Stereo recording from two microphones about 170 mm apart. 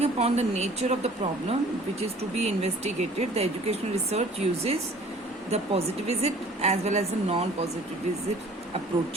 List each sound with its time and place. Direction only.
0.0 s speech: 40° right (ahead or behind)